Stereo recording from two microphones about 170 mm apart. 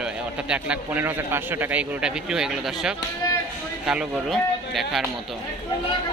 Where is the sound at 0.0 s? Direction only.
5° right (ahead or behind).